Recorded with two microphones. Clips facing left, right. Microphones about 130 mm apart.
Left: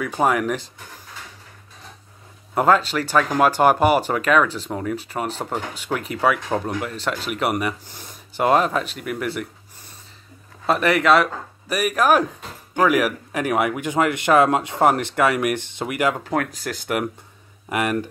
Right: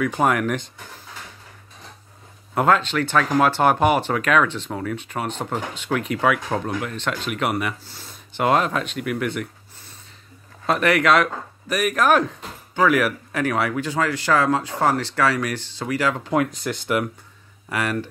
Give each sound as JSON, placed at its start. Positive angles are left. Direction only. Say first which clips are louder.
{"t": 0.2, "sound": "speech", "louder": "left 2 dB", "side_deg": 0}
{"t": 2.5, "sound": "speech", "louder": "left 1 dB", "side_deg": 5}
{"t": 10.7, "sound": "speech", "louder": "left 1 dB", "side_deg": 0}
{"t": 16.4, "sound": "speech", "louder": "right 2 dB", "side_deg": 5}
{"t": 17.6, "sound": "speech", "louder": "left 2 dB", "side_deg": 15}